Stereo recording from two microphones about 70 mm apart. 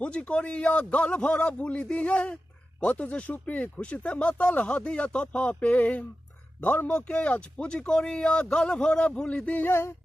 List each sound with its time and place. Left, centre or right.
0.0 s speech: centre